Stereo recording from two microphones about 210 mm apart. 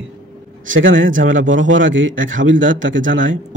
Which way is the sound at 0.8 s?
65° right (ahead or behind).